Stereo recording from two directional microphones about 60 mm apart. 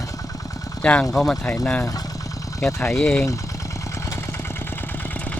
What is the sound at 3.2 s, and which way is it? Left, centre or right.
Vehicle, left.